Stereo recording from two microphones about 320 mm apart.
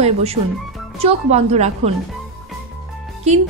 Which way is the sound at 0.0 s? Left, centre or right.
Centre.